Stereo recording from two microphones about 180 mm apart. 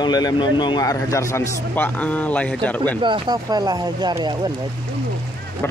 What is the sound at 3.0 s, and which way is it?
Speech, 25° right (ahead or behind).